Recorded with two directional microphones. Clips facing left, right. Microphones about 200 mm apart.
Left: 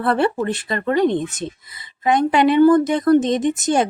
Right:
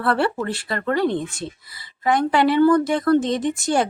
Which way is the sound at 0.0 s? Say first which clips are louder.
Left 3 dB; 20° left (ahead or behind).